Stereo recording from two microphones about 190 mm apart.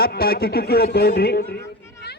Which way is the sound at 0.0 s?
55° left (ahead or behind).